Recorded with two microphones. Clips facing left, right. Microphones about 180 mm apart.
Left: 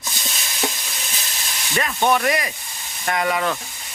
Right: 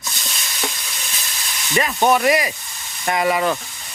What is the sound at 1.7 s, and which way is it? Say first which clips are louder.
Speech: right 3 dB; 10° right (ahead or behind).